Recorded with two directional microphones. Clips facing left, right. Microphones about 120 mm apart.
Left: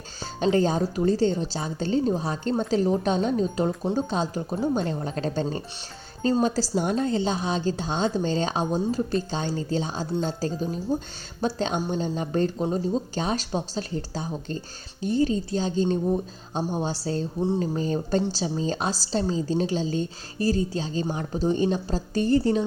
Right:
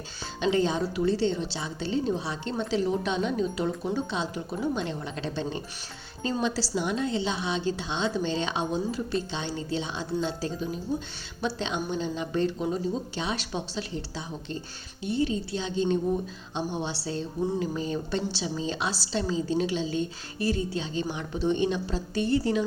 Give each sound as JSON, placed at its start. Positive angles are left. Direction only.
{"t": 0.3, "sound": "a woman's voice", "side_deg": 40}
{"t": 17.4, "sound": "a sound", "side_deg": 30}
{"t": 17.7, "sound": "a woman's voice", "side_deg": 40}